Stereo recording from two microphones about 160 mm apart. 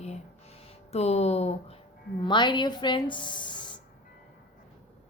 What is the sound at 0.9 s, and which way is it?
Speech, 40° left (ahead or behind).